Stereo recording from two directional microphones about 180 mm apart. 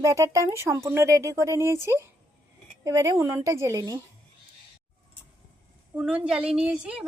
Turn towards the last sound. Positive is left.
turn(degrees=-5)  # may be behind; listen again after turning